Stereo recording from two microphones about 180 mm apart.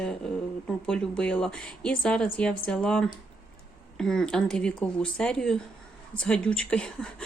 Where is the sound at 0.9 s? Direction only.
5° left (ahead or behind).